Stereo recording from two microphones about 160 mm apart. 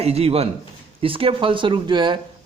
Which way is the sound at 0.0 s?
40° right (ahead or behind).